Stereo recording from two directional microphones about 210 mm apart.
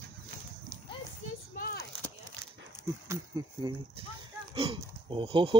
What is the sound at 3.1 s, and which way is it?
Speech, 20° right (ahead or behind).